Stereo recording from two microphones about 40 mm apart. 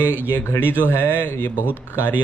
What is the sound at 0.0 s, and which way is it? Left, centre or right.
Speech, right.